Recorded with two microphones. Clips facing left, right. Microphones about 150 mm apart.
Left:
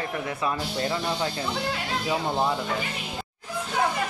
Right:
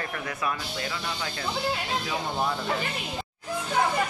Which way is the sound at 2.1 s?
20° left (ahead or behind).